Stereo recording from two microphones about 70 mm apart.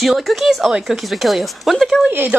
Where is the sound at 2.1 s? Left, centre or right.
Right.